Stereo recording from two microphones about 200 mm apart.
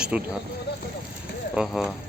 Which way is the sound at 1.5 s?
Centre (ahead or behind).